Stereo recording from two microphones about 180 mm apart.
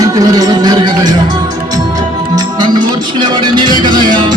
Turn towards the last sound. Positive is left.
turn(degrees=-25)  # may be behind; listen again after turning